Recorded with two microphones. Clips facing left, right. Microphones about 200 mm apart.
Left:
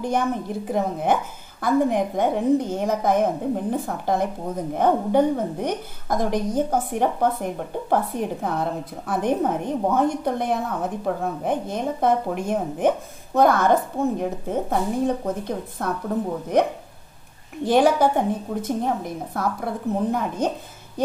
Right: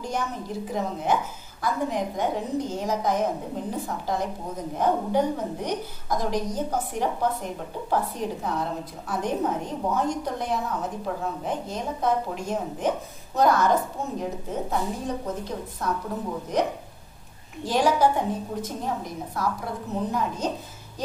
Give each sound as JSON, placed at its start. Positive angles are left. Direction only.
{"t": 0.0, "sound": "a woman's voice", "side_deg": 55}